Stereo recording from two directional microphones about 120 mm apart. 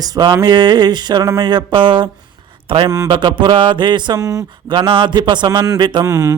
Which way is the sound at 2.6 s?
45° right (ahead or behind).